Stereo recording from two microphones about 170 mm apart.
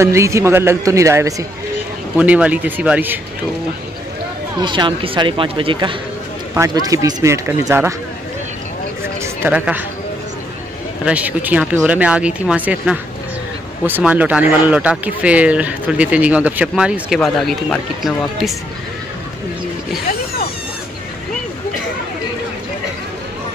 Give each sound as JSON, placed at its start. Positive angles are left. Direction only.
{"t": 0.0, "sound": "speech", "side_deg": -15}
{"t": 2.1, "sound": "speech", "side_deg": -5}
{"t": 4.6, "sound": "speech", "side_deg": -25}
{"t": 9.2, "sound": "speech", "side_deg": -10}
{"t": 11.1, "sound": "speech", "side_deg": -10}